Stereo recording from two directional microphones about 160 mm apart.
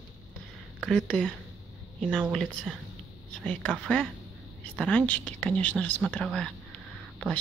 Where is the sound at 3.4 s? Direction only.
5° left (ahead or behind).